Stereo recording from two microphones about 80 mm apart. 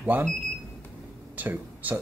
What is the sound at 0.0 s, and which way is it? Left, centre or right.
Speech, right.